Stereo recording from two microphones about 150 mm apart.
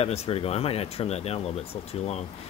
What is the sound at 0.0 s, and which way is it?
Speech, 40° left (ahead or behind).